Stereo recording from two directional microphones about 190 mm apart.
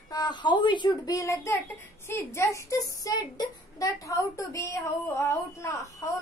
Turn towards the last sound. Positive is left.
turn(degrees=15)  # may be behind; listen again after turning